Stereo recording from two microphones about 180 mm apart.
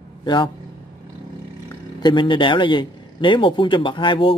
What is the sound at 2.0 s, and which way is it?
Speech, 25° left (ahead or behind).